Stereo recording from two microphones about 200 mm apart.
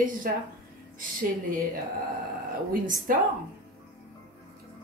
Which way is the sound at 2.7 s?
45° right (ahead or behind).